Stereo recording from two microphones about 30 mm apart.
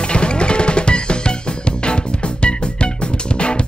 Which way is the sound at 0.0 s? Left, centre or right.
Left.